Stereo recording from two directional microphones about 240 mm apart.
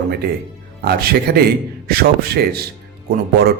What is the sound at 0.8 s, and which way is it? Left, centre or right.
Speech, right.